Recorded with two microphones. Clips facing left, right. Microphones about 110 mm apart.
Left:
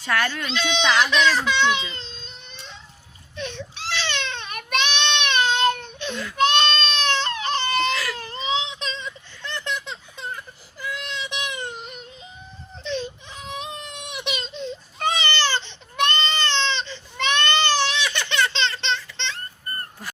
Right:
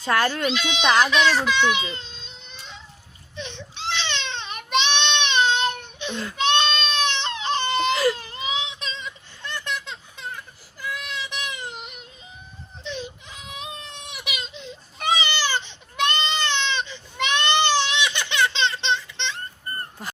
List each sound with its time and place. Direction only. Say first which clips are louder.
0.0 s speech: right 2 dB; 25° right (ahead or behind)
0.5 s a child's voice: left 2 dB; 10° right (ahead or behind)
3.3 s child singing: left 3 dB; 20° right (ahead or behind)
6.3 s baby cry: left 2 dB; 20° right (ahead or behind)
8.4 s a sound: left 3 dB; 5° right (ahead or behind)
10.8 s baby cry: even; 5° right (ahead or behind)